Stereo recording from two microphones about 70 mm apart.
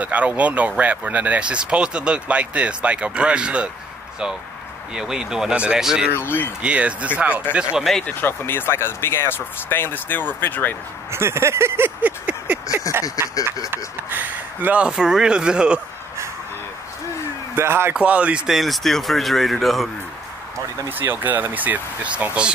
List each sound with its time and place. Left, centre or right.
0.0 s speech: centre
4.9 s speech: centre
6.1 s speech: left
6.6 s speech: centre
8.1 s speech: left
11.1 s a sound: right
12.0 s speech: right
13.7 s speech: right
17.6 s a sound: right
17.9 s speech: centre
18.5 s speech: centre
20.9 s speech: right